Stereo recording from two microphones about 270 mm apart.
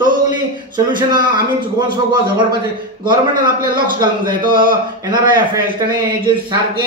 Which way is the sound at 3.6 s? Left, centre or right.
Right.